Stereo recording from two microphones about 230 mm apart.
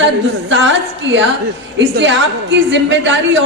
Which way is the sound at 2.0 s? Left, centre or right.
Right.